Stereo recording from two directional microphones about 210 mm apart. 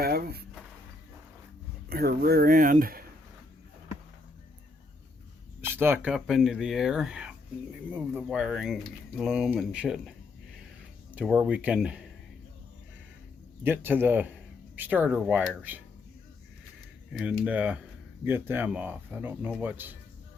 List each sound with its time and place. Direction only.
0.0 s speech: 45° right (ahead or behind)
1.9 s speech: 45° right (ahead or behind)
5.6 s speech: 10° right (ahead or behind)
11.1 s speech: 5° right (ahead or behind)
13.7 s speech: 10° right (ahead or behind)
17.1 s speech: centre (ahead or behind)